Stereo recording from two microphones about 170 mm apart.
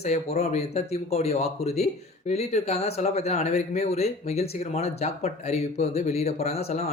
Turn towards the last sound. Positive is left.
turn(degrees=40)  # may be behind; listen again after turning